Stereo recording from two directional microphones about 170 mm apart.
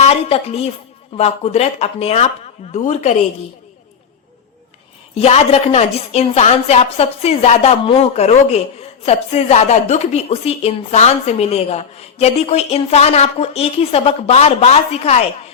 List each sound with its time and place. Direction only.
0.0 s a woman's voice: 35° left (ahead or behind)
5.1 s a woman's voice: 35° left (ahead or behind)